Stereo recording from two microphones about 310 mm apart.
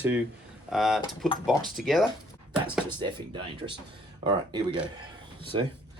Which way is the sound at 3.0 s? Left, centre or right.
Centre.